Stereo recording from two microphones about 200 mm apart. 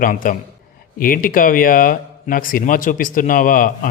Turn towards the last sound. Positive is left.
turn(degrees=45)  # may be behind; listen again after turning